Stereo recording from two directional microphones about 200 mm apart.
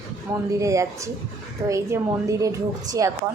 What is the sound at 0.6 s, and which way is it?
A woman's voice, 15° right (ahead or behind).